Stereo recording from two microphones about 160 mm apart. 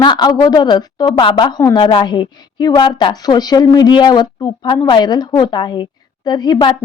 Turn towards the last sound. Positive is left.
turn(degrees=25)  # may be behind; listen again after turning